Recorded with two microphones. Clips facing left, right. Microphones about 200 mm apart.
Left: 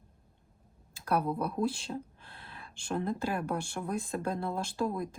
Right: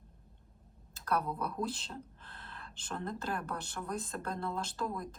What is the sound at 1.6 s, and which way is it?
Speech, 10° left (ahead or behind).